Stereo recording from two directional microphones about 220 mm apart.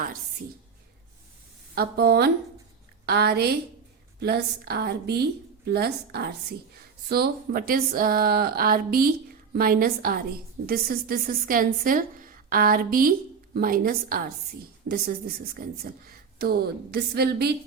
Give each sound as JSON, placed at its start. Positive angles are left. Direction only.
{"t": 1.7, "sound": "a woman's voice", "side_deg": -45}